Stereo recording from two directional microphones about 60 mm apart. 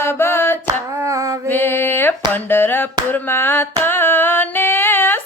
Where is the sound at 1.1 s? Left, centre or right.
Right.